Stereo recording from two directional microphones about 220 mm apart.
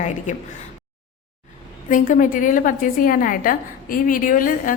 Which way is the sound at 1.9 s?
35° left (ahead or behind).